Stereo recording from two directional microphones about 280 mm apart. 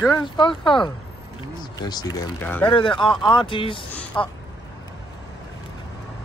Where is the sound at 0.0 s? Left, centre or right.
Centre.